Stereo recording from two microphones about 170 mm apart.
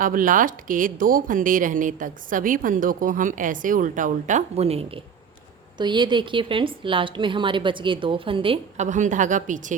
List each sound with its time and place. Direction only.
0.0 s a woman's voice: 55° right (ahead or behind); by 8.5 s 30° right (ahead or behind)
8.8 s speech: 45° right (ahead or behind)